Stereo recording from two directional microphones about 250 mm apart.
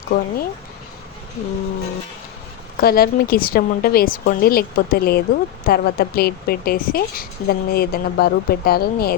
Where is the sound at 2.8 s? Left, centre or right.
Left.